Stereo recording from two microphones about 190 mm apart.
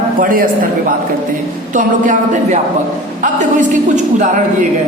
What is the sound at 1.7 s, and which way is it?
A woman's voice, 40° right (ahead or behind).